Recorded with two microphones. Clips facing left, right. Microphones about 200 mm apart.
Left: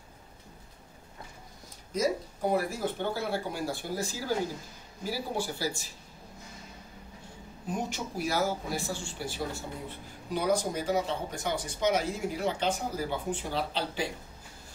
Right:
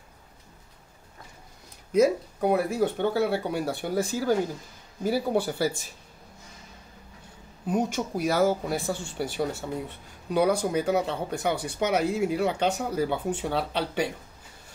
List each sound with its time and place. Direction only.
2.0 s speech: 65° right (ahead or behind)
7.7 s speech: 55° right (ahead or behind)